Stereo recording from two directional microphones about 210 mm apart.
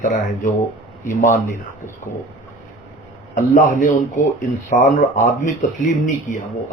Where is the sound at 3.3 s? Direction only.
40° left (ahead or behind).